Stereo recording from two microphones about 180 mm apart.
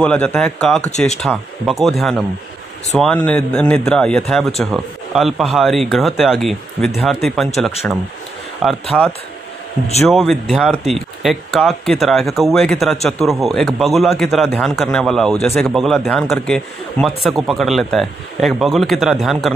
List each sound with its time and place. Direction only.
0.0 s speech: 5° left (ahead or behind)